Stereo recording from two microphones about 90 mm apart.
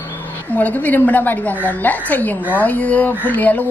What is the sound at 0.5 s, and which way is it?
A woman's voice, 15° left (ahead or behind).